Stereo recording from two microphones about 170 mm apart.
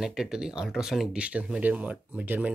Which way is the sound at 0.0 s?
5° right (ahead or behind).